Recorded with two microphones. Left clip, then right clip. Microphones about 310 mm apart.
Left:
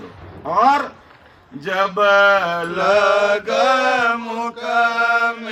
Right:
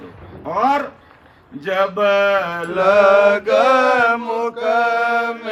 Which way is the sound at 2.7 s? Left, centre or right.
Right.